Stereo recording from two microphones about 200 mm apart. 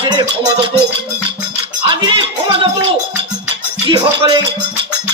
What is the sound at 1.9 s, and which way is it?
Music, 25° right (ahead or behind).